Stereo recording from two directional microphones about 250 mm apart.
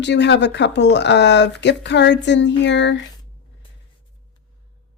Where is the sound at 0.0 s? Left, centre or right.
Left.